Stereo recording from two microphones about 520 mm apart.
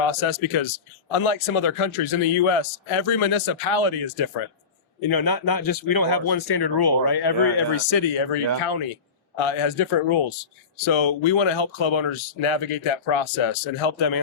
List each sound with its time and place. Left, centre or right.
0.1 s speech: left
4.9 s speech: left
9.4 s speech: left